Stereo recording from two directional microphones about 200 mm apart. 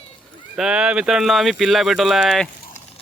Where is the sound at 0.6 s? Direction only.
5° right (ahead or behind).